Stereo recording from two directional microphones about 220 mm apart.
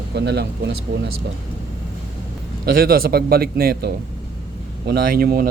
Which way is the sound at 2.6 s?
40° right (ahead or behind).